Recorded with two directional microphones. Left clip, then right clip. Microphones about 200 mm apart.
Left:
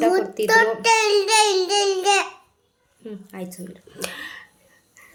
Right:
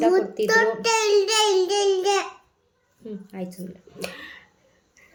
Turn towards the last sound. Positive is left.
turn(degrees=0)  # may be behind; listen again after turning